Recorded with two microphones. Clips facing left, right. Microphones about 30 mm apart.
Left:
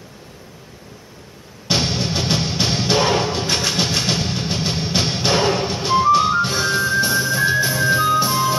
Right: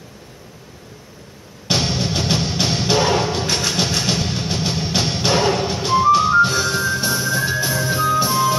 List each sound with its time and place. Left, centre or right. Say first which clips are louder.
2.0 s music: even; centre